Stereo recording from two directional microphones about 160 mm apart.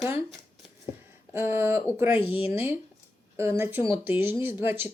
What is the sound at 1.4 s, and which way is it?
Speech, 15° right (ahead or behind).